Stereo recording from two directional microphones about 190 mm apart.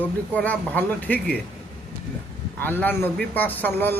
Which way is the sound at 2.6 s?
10° left (ahead or behind).